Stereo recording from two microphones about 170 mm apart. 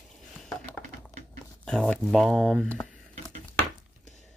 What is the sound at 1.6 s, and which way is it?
Speech, 5° left (ahead or behind).